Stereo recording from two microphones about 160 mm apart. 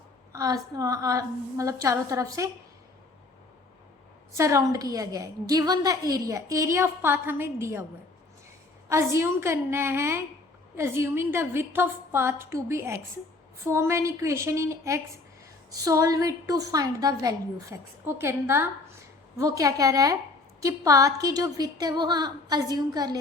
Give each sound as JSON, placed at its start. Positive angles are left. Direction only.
{"t": 0.3, "sound": "a woman's voice", "side_deg": -20}
{"t": 4.4, "sound": "a woman's voice", "side_deg": -20}
{"t": 8.9, "sound": "a woman's voice", "side_deg": -15}